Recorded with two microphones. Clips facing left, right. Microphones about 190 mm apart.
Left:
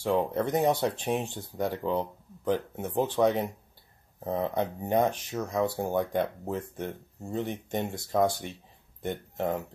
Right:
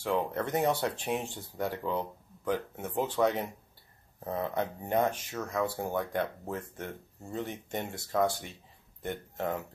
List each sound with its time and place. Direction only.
0.0 s speech: 15° left (ahead or behind)